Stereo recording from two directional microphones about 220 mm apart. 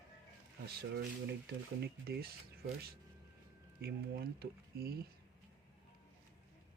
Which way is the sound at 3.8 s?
45° right (ahead or behind).